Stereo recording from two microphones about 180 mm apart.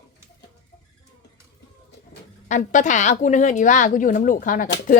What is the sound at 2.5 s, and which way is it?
A woman's voice, 45° left (ahead or behind).